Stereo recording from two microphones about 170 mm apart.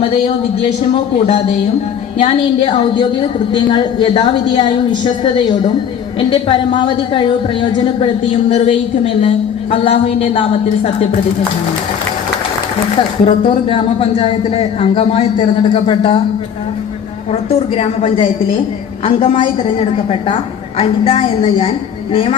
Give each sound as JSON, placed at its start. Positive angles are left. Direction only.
{"t": 0.0, "sound": "speech", "side_deg": 30}
{"t": 2.1, "sound": "a woman's voice", "side_deg": 30}
{"t": 13.0, "sound": "speech", "side_deg": 30}
{"t": 17.5, "sound": "speech", "side_deg": 30}